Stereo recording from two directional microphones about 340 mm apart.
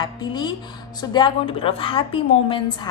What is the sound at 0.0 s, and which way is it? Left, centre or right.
A woman's voice, centre.